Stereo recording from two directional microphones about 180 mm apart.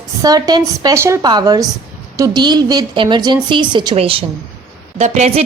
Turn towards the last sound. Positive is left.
turn(degrees=-40)  # may be behind; listen again after turning